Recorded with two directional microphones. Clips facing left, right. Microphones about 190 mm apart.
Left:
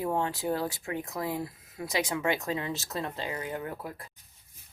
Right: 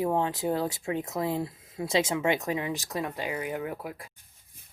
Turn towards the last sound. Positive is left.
turn(degrees=-10)  # may be behind; listen again after turning